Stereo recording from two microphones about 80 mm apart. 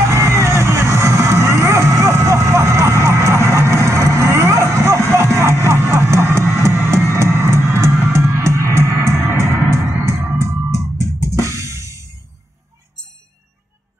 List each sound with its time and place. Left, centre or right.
0.0 s music: right